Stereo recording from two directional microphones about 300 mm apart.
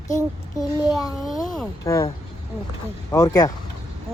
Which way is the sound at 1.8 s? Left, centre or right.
Centre.